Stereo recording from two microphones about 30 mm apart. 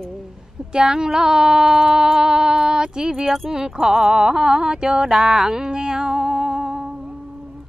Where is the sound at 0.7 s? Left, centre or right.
Right.